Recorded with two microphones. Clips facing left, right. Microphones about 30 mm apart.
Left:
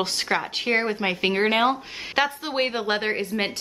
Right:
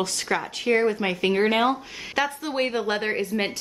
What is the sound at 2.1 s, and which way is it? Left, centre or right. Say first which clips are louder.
Speech: left 1 dB; left.